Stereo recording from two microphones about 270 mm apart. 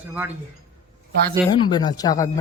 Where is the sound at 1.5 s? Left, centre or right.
Centre.